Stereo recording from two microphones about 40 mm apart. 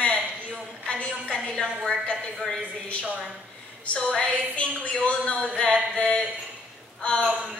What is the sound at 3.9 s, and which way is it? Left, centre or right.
Speech, centre.